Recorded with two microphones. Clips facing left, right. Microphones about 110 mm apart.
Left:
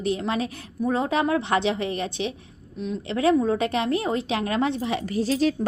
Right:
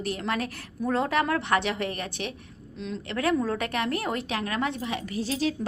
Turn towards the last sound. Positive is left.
turn(degrees=35)  # may be behind; listen again after turning